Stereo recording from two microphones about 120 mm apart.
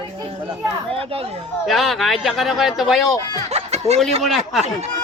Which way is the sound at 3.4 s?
65° right (ahead or behind).